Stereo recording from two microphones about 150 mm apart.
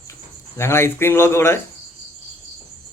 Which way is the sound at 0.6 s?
15° left (ahead or behind).